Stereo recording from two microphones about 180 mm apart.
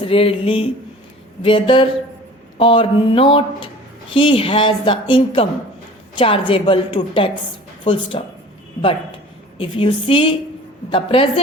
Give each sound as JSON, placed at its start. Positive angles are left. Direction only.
{"t": 0.0, "sound": "a woman's voice", "side_deg": 30}